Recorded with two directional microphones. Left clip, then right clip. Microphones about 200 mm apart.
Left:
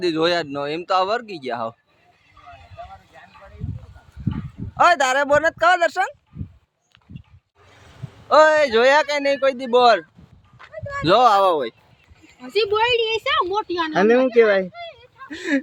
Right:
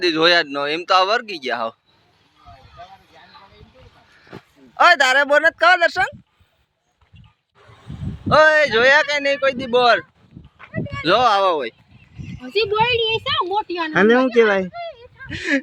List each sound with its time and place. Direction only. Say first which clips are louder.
0.0 s speech: right 5 dB; centre (ahead or behind)
4.8 s speech: right 3 dB; 5° left (ahead or behind)
8.3 s speech: right 1 dB; 10° left (ahead or behind)
12.4 s speech: right 1 dB; 45° right (ahead or behind); by 13.9 s 30° right (ahead or behind)
13.9 s speech: right 1 dB; 45° right (ahead or behind)
15.3 s speech: right 2 dB; 5° left (ahead or behind)